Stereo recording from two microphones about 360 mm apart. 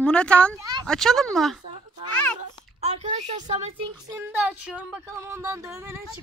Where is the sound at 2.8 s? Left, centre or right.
Centre.